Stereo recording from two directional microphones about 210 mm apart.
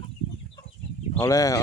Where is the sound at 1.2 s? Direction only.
15° left (ahead or behind).